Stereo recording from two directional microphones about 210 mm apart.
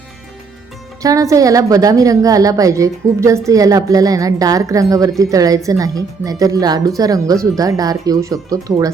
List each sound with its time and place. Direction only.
1.0 s a woman's voice: 15° right (ahead or behind)